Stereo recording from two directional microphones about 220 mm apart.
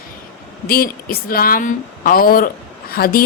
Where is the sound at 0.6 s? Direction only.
45° left (ahead or behind).